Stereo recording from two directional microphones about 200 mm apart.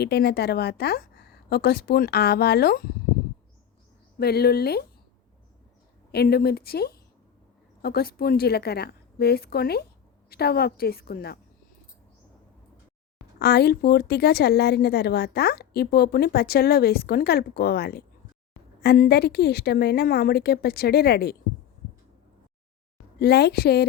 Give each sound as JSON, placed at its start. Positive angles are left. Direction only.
{"t": 0.0, "sound": "a woman's voice", "side_deg": 55}
{"t": 4.2, "sound": "a woman's voice", "side_deg": 50}
{"t": 6.1, "sound": "a woman's voice", "side_deg": 50}
{"t": 13.4, "sound": "a woman's voice", "side_deg": 55}
{"t": 23.2, "sound": "a woman's voice", "side_deg": 55}